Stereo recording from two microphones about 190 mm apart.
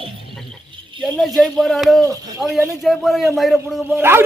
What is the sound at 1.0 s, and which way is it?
A man's voice, centre (ahead or behind).